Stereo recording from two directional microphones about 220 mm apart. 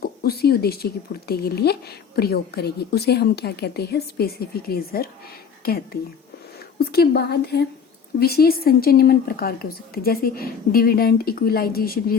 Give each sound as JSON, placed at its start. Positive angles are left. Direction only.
{"t": 0.0, "sound": "speech", "side_deg": 45}